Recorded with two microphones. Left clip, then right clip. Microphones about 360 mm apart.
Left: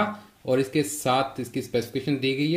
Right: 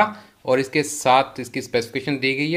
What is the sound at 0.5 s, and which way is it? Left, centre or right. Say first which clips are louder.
Speech: right 4 dB; centre.